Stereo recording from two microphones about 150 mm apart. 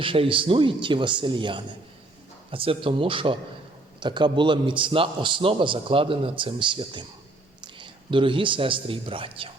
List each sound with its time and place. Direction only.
0.0 s a man's voice: 35° right (ahead or behind)